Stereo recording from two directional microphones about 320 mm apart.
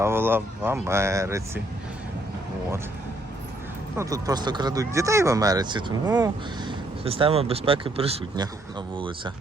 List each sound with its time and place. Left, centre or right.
0.0 s speech: centre
3.9 s speech: centre